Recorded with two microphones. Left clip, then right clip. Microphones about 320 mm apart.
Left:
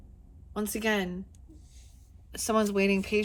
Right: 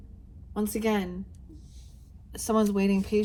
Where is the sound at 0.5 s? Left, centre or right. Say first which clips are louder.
Right 1 dB; left.